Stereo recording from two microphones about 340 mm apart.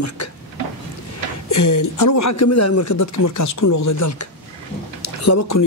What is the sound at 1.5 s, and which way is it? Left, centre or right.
A man's voice, left.